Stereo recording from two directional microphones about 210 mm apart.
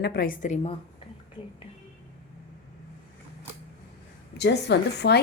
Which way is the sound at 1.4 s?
20° left (ahead or behind).